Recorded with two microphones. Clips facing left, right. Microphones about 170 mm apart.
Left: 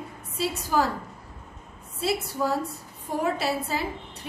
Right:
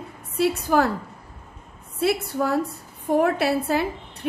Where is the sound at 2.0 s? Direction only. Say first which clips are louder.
Right 4 dB; 60° right (ahead or behind).